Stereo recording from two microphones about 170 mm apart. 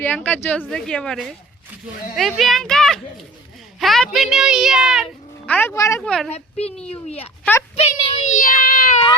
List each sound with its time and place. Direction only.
0.0 s a child's voice: 10° left (ahead or behind)
5.5 s speech: 10° left (ahead or behind)
6.0 s a child's voice: 5° left (ahead or behind)
6.3 s a child's voice: 35° left (ahead or behind); by 9.0 s 55° left (ahead or behind)